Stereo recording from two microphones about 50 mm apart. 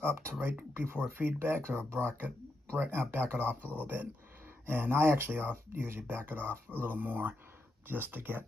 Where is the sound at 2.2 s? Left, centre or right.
Right.